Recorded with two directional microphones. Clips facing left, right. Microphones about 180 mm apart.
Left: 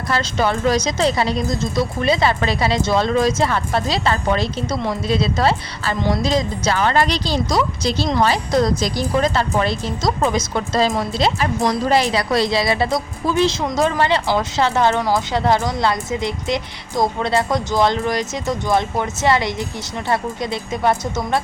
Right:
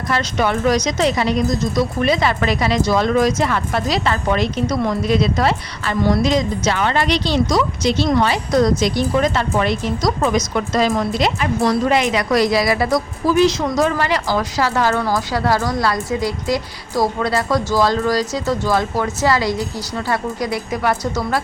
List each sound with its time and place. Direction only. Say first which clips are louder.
0.1 s a woman's voice: right 1 dB; 30° left (ahead or behind)